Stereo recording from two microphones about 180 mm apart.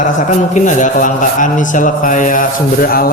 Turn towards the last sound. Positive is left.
turn(degrees=55)  # may be behind; listen again after turning